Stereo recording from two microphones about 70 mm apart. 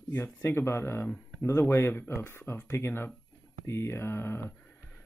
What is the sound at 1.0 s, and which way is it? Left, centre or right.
Speech, left.